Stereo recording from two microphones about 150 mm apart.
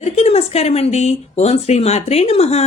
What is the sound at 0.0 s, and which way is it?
Speech, 45° left (ahead or behind).